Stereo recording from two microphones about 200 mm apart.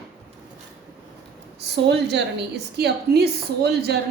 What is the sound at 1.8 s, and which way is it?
A woman's voice, 60° right (ahead or behind).